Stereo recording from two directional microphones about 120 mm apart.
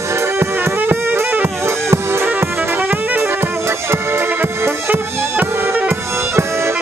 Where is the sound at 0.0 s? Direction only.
20° right (ahead or behind).